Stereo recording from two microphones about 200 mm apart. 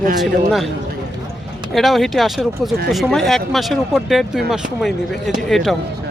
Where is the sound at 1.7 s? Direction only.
Centre (ahead or behind).